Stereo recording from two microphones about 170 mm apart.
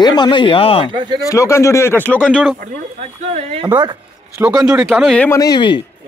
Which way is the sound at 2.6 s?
40° right (ahead or behind).